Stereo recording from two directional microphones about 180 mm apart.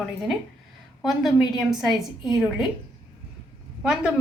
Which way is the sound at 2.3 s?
Centre (ahead or behind).